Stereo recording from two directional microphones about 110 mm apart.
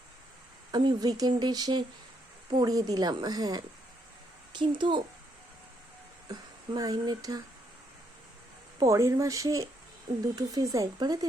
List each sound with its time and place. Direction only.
0.7 s speech: 40° right (ahead or behind)
6.7 s speech: 40° right (ahead or behind)
8.8 s speech: 30° right (ahead or behind)